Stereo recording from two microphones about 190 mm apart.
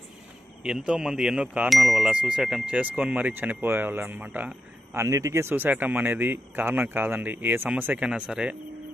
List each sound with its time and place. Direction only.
0.7 s speech: 5° right (ahead or behind)